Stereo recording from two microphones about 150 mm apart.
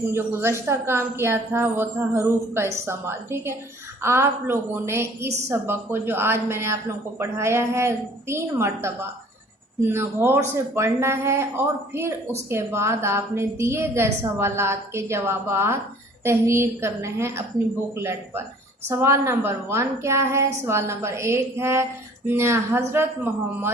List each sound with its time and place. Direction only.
0.1 s a woman's voice: 15° right (ahead or behind)